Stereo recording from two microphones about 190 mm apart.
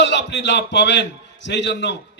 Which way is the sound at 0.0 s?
65° left (ahead or behind).